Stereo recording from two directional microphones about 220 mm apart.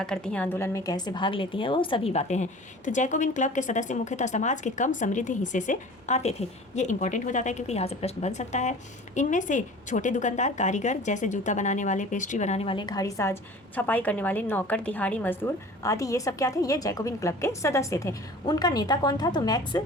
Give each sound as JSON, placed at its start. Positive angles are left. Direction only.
{"t": 0.0, "sound": "a woman's voice", "side_deg": 5}